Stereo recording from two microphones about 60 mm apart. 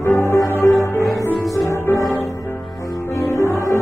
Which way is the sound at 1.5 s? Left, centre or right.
Left.